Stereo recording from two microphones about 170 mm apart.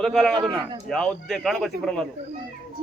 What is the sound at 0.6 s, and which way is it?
Speech, 25° right (ahead or behind).